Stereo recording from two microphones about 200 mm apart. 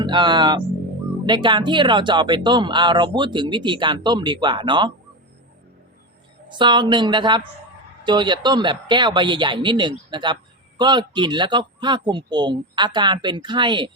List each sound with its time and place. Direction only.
0.0 s speech: 25° right (ahead or behind)
6.5 s speech: 25° right (ahead or behind)